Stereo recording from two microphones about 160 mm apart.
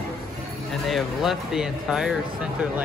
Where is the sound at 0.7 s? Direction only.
Centre (ahead or behind).